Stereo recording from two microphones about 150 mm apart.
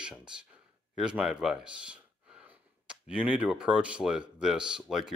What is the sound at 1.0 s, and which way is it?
Speech, 5° right (ahead or behind).